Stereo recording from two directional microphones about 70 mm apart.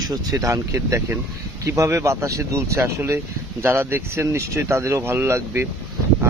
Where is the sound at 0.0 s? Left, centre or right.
Right.